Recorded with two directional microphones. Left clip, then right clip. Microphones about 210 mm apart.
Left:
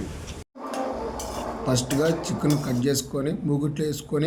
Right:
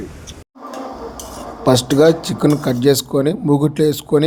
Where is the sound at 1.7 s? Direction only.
35° right (ahead or behind).